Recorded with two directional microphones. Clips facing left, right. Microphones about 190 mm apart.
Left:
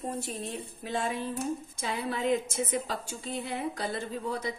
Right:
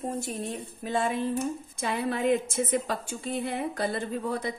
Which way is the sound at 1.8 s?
55° right (ahead or behind).